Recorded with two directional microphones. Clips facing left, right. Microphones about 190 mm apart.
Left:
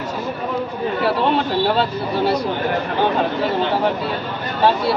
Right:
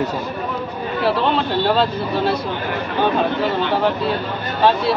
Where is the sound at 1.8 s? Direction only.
15° left (ahead or behind).